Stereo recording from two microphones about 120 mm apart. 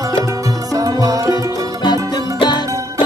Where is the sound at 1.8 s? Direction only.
40° left (ahead or behind).